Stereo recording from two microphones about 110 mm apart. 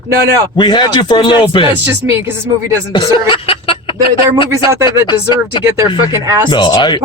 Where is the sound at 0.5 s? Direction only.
45° left (ahead or behind).